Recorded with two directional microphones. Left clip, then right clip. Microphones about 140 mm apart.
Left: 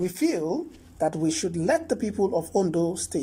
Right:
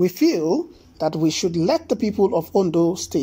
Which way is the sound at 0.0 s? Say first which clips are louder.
Right 7 dB; 15° right (ahead or behind).